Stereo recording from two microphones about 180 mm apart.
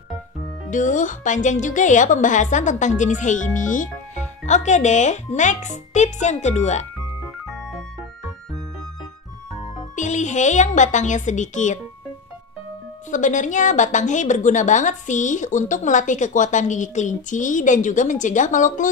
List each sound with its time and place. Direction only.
0.7 s a woman's voice: 45° left (ahead or behind)
9.9 s a woman's voice: 40° left (ahead or behind)
13.1 s a woman's voice: 45° left (ahead or behind)